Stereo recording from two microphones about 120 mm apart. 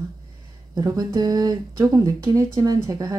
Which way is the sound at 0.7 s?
35° right (ahead or behind).